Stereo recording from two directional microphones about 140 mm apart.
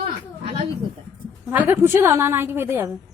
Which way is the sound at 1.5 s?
15° right (ahead or behind).